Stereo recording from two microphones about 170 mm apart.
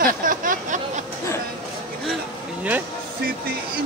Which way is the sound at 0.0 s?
55° right (ahead or behind).